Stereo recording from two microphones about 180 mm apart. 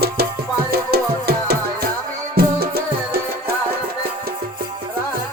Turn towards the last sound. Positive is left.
turn(degrees=-60)  # may be behind; listen again after turning